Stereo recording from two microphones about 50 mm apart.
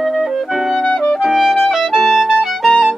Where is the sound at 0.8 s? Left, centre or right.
Centre.